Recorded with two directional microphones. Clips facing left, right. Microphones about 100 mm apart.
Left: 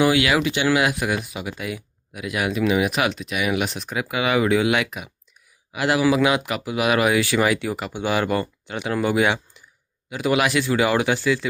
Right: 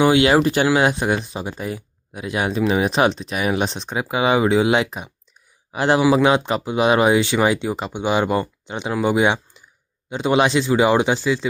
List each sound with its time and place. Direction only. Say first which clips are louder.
0.0 s speech: right 4 dB; 25° right (ahead or behind)